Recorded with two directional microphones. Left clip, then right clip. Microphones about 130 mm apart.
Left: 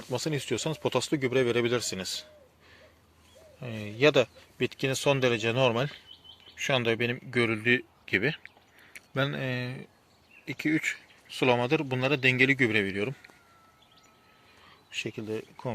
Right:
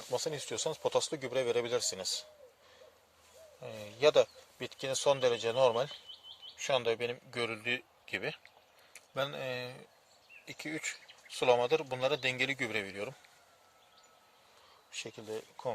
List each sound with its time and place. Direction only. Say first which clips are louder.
0.1 s speech: left 5 dB; 25° right (ahead or behind)
3.6 s speech: left 5 dB; 15° right (ahead or behind)
14.8 s speech: left 8 dB; 30° right (ahead or behind)
15.3 s speech: left 4 dB; 40° right (ahead or behind)